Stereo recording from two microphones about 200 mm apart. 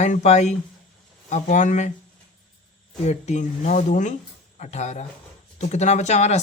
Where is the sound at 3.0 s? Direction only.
35° left (ahead or behind).